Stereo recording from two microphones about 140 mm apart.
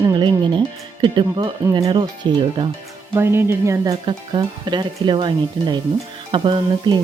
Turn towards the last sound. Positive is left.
turn(degrees=-35)  # may be behind; listen again after turning